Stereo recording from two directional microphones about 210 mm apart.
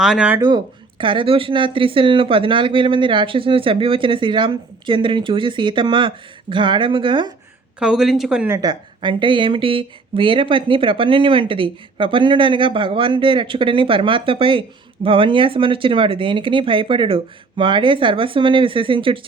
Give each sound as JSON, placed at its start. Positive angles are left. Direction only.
{"t": 0.0, "sound": "speech", "side_deg": -5}
{"t": 0.4, "sound": "speech", "side_deg": -20}
{"t": 7.8, "sound": "speech", "side_deg": -5}
{"t": 8.5, "sound": "speech", "side_deg": -20}